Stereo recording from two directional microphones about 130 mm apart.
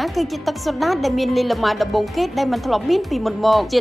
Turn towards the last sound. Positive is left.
turn(degrees=0)  # may be behind; listen again after turning